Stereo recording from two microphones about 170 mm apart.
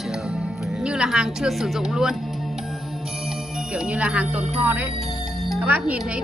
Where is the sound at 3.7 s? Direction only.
5° right (ahead or behind).